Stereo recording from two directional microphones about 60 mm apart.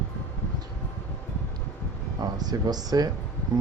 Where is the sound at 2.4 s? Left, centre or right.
Right.